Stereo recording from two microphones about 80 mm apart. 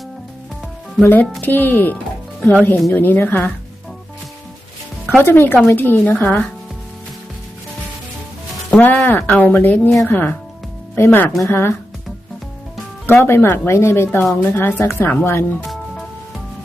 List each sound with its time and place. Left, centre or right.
1.0 s speech: left
5.2 s speech: left
8.7 s speech: left
13.1 s speech: left